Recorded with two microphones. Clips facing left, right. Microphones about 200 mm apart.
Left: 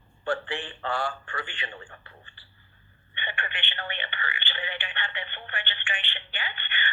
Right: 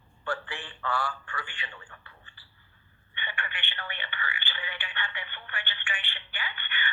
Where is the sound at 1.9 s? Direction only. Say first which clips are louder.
Left 4 dB; 25° left (ahead or behind).